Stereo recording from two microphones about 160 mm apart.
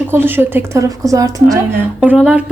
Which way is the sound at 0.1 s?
15° right (ahead or behind).